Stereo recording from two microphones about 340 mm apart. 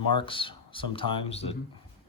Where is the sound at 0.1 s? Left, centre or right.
Centre.